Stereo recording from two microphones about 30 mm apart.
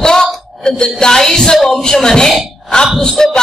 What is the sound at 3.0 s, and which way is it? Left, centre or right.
Speech, left.